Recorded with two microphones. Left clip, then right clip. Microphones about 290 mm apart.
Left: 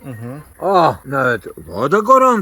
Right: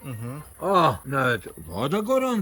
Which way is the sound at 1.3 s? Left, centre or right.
Centre.